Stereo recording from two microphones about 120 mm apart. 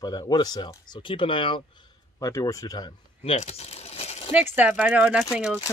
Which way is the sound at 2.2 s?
30° left (ahead or behind).